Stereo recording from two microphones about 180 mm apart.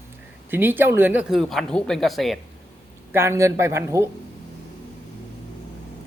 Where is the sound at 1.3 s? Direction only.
Centre (ahead or behind).